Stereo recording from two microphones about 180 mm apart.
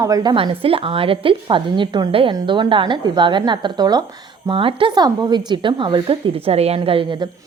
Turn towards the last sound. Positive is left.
turn(degrees=-25)  # may be behind; listen again after turning